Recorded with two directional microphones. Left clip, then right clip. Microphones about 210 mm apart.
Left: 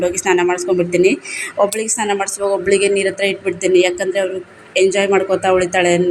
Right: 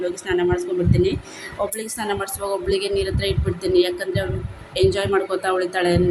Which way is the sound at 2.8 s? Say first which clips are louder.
Left 7 dB; 45° left (ahead or behind).